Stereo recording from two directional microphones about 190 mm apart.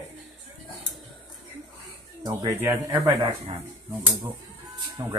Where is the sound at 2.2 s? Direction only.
20° right (ahead or behind).